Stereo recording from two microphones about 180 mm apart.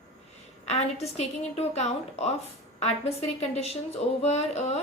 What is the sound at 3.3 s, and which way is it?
A woman's voice, 35° left (ahead or behind).